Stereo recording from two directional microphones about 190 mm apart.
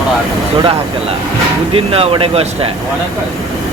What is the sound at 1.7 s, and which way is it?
Speech, 30° right (ahead or behind).